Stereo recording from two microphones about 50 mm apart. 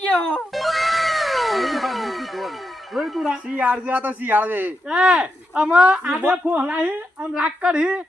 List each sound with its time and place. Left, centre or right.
0.2 s music: centre
0.5 s cat: centre
2.9 s speech: centre
3.5 s a man's voice: right
4.9 s a woman's voice: centre